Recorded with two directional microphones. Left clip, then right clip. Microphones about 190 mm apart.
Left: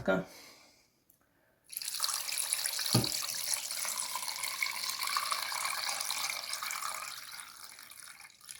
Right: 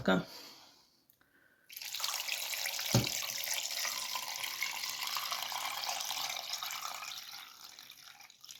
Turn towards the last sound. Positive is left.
turn(degrees=-20)  # may be behind; listen again after turning